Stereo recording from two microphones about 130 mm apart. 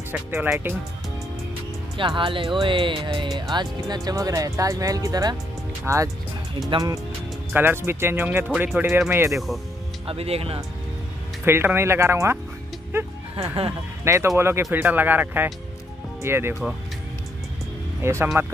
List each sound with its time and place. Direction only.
0.1 s speech: 10° right (ahead or behind)
2.0 s speech: 40° right (ahead or behind); by 6.0 s 20° right (ahead or behind)
7.5 s speech: 15° right (ahead or behind)
10.0 s speech: 50° right (ahead or behind)
11.4 s speech: 20° right (ahead or behind)
13.4 s speech: 45° right (ahead or behind)
14.0 s speech: 20° right (ahead or behind)
18.0 s speech: 20° right (ahead or behind)